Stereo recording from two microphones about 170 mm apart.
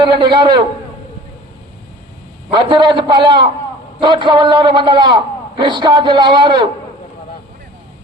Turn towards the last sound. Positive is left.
turn(degrees=-25)  # may be behind; listen again after turning